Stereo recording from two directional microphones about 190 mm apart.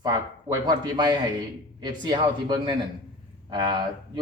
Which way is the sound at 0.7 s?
25° right (ahead or behind).